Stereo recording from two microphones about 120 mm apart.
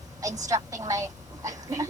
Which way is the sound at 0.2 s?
30° right (ahead or behind).